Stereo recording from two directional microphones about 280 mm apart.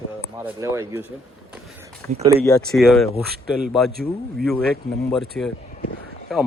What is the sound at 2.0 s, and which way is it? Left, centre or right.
Speech, centre.